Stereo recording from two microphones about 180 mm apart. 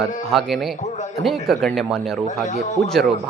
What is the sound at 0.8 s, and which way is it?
Speech, 40° left (ahead or behind).